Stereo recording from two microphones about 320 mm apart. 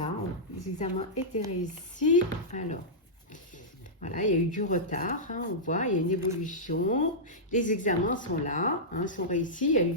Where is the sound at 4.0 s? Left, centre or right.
Left.